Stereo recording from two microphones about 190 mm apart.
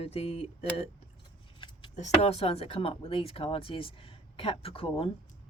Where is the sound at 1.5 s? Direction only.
25° left (ahead or behind).